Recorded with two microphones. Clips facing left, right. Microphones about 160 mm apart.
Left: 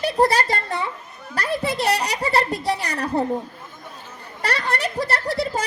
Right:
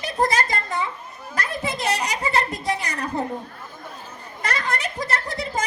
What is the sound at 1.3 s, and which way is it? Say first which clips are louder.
A woman's voice: left 4 dB; 70° left (ahead or behind).